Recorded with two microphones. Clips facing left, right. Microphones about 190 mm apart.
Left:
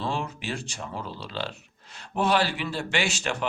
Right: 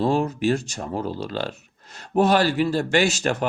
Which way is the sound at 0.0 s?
40° right (ahead or behind).